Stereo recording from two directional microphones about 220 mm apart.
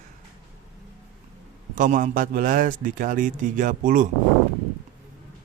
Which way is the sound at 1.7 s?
35° right (ahead or behind).